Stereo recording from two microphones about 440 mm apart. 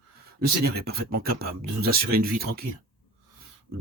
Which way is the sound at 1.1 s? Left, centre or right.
Right.